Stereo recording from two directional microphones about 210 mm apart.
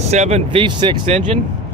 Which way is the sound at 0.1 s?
30° right (ahead or behind).